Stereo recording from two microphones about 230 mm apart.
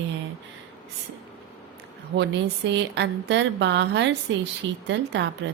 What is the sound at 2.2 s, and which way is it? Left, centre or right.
A woman's voice, right.